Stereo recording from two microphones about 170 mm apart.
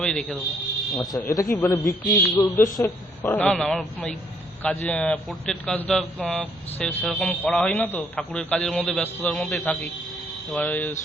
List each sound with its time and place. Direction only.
0.0 s a man's voice: 5° left (ahead or behind)
0.9 s a man's voice: 20° left (ahead or behind)